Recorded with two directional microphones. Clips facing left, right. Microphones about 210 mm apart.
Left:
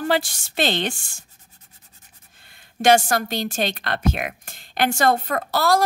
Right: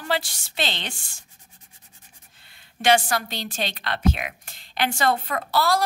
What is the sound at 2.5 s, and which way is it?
A woman's voice, 45° left (ahead or behind).